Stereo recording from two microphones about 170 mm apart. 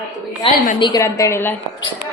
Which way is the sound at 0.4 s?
35° left (ahead or behind).